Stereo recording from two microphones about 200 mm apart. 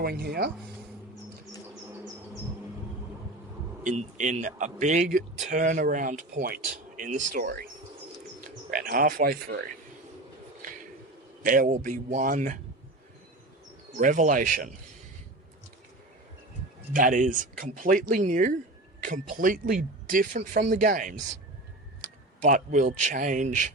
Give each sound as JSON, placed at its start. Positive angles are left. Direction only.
{"t": 0.0, "sound": "speech", "side_deg": -50}
{"t": 3.8, "sound": "speech", "side_deg": -40}
{"t": 8.7, "sound": "speech", "side_deg": -45}
{"t": 10.6, "sound": "a sound", "side_deg": -40}
{"t": 11.4, "sound": "speech", "side_deg": -45}
{"t": 14.0, "sound": "speech", "side_deg": -40}
{"t": 16.9, "sound": "speech", "side_deg": -40}
{"t": 22.4, "sound": "speech", "side_deg": -40}